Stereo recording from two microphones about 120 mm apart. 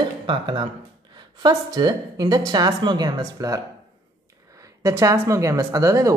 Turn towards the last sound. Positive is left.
turn(degrees=-25)  # may be behind; listen again after turning